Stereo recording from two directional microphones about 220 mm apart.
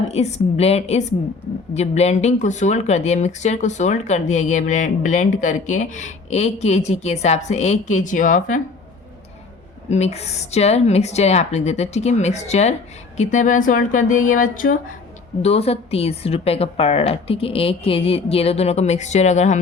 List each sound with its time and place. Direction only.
0.1 s speech: 30° left (ahead or behind)
9.9 s speech: 30° left (ahead or behind)
15.4 s speech: 30° left (ahead or behind)